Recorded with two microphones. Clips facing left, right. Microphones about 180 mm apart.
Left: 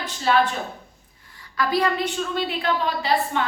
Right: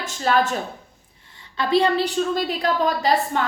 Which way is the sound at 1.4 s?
25° right (ahead or behind).